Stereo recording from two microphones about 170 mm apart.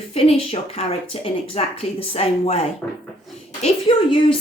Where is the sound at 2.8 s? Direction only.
10° left (ahead or behind).